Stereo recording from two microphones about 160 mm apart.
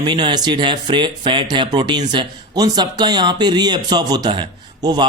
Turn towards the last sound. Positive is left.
turn(degrees=-25)  # may be behind; listen again after turning